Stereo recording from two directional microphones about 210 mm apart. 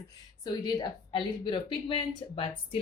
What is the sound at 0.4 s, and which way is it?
Speech, 20° left (ahead or behind).